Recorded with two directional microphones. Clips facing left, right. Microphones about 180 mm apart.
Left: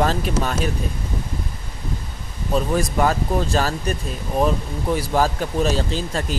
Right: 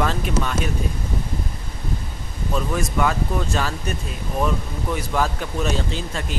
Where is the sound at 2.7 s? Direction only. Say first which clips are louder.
Left 1 dB; 35° left (ahead or behind).